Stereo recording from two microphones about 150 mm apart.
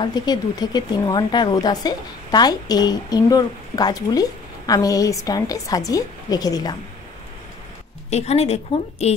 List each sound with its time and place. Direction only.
0.0 s speech: 30° left (ahead or behind)
8.1 s speech: 45° left (ahead or behind)